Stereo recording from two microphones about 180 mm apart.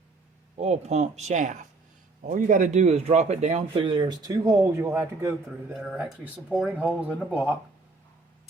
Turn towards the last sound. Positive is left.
turn(degrees=-5)  # may be behind; listen again after turning